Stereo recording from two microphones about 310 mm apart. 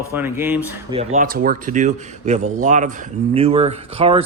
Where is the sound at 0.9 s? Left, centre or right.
Right.